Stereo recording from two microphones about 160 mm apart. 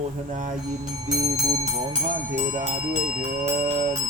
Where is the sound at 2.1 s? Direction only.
55° right (ahead or behind).